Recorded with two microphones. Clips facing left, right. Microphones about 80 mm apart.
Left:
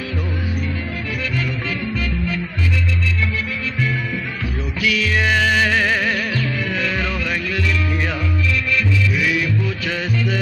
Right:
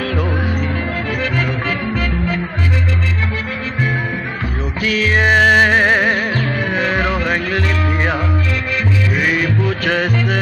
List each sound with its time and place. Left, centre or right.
4.8 s music: right